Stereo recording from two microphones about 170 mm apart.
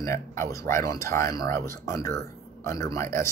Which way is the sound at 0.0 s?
15° left (ahead or behind).